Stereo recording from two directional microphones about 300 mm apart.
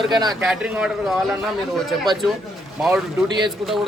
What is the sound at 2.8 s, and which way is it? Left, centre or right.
Speech, centre.